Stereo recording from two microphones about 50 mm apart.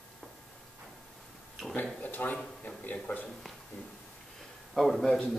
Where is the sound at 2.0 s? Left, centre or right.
Left.